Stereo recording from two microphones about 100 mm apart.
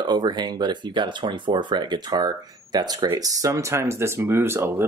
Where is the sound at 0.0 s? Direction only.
50° right (ahead or behind).